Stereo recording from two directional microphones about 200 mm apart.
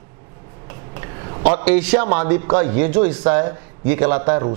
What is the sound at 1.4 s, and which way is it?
Speech, 10° right (ahead or behind).